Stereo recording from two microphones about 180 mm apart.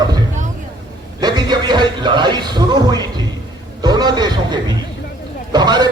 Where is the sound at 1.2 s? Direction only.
25° right (ahead or behind).